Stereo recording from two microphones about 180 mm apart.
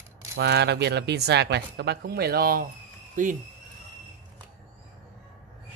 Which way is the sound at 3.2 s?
45° right (ahead or behind).